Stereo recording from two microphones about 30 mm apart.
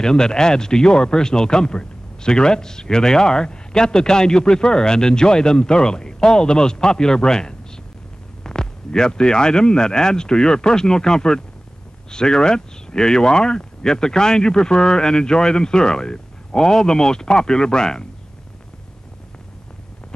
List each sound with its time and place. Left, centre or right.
0.0 s speech: left